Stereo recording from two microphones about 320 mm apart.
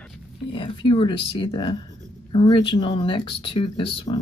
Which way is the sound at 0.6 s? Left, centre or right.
Centre.